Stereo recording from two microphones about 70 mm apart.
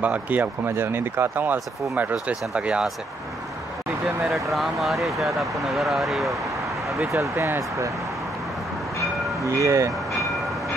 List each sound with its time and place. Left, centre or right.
0.0 s speech: right
4.3 s speech: centre
7.1 s speech: right
9.4 s speech: right